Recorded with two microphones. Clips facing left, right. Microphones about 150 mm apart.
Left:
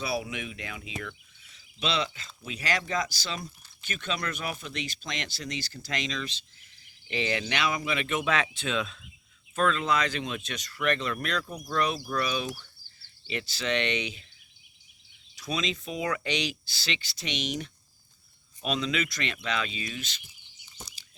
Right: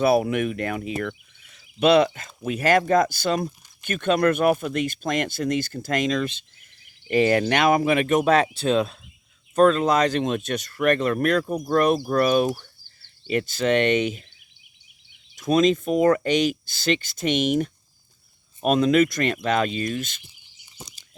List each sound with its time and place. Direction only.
0.0 s speech: 55° right (ahead or behind)
15.4 s speech: 50° right (ahead or behind)